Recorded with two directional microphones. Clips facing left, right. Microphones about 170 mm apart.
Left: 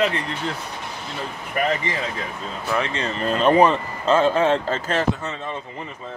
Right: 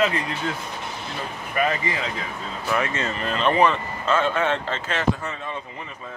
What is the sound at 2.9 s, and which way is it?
Speech, 35° left (ahead or behind).